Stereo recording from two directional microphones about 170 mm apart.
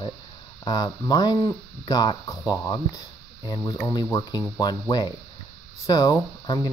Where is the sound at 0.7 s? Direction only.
25° left (ahead or behind).